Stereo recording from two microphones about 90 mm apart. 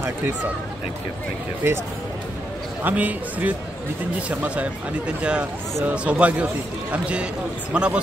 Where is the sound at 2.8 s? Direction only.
20° right (ahead or behind).